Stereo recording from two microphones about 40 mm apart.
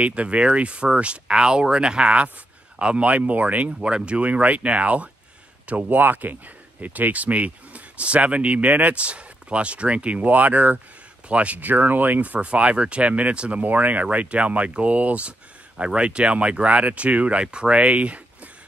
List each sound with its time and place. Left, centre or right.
0.0 s speech: right
3.8 s speech: right
5.9 s speech: right
15.8 s speech: right